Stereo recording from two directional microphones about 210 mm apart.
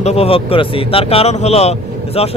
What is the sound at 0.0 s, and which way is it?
Speech, 30° left (ahead or behind).